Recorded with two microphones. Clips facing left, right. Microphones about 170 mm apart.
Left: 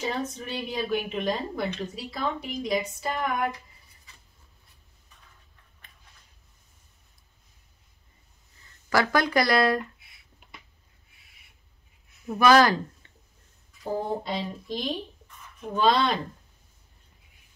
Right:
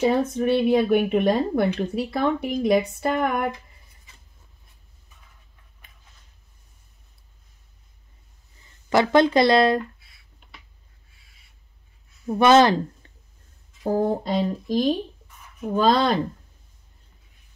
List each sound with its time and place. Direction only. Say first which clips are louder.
0.0 s speech: right 11 dB; 60° right (ahead or behind)
8.9 s speech: right 6 dB; 25° right (ahead or behind)
12.3 s speech: right 3 dB; 25° right (ahead or behind)
14.2 s speech: right 8 dB; 45° right (ahead or behind)